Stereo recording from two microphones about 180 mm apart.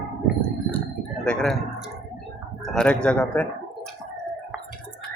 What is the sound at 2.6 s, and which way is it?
Speech, 5° left (ahead or behind).